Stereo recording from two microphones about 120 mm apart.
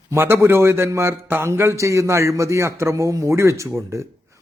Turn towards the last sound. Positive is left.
turn(degrees=-25)  # may be behind; listen again after turning